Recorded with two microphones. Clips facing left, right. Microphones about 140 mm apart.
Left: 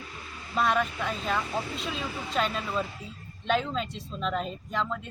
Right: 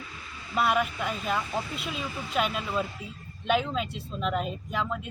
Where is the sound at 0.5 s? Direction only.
5° right (ahead or behind).